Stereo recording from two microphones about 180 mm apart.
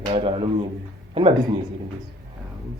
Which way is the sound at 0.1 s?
30° right (ahead or behind).